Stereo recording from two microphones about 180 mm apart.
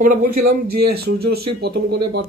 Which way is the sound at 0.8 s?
60° right (ahead or behind).